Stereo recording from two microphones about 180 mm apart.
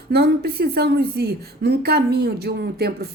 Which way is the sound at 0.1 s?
60° right (ahead or behind).